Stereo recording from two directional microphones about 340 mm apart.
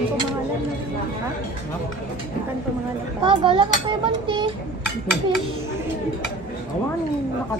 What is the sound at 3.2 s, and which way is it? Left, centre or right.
Speech, centre.